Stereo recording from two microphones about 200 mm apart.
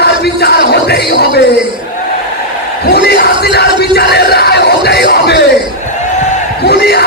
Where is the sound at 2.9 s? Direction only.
55° left (ahead or behind).